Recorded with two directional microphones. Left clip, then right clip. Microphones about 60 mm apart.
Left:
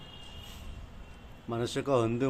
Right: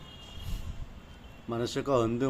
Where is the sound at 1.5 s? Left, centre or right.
Left.